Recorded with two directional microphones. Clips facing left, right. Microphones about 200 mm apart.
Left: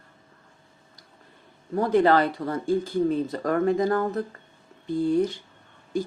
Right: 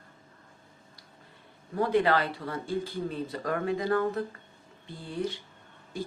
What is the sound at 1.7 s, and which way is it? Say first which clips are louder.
Speech: left 5 dB; 45° left (ahead or behind).